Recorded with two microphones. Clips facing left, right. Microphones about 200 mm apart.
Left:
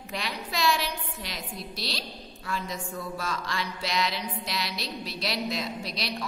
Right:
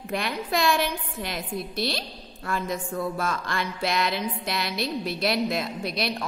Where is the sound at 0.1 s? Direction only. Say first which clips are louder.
Right 7 dB; 55° right (ahead or behind).